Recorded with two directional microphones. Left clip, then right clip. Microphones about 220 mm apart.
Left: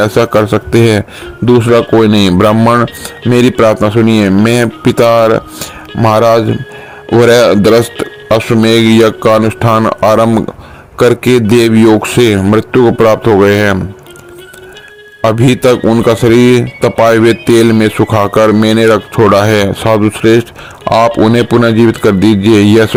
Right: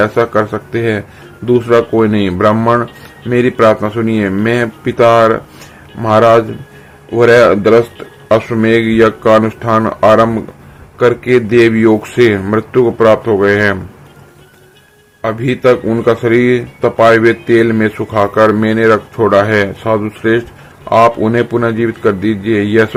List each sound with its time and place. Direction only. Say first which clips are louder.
0.0 s a man's voice: left 3 dB; 45° left (ahead or behind)
2.6 s speech: left 3 dB; 35° left (ahead or behind)
2.8 s a man's voice: left 8 dB; 50° left (ahead or behind)
15.2 s a man's voice: left 4 dB; 50° left (ahead or behind)